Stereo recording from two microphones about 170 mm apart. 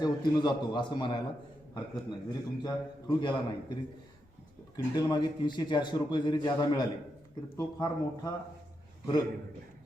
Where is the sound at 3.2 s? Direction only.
25° left (ahead or behind).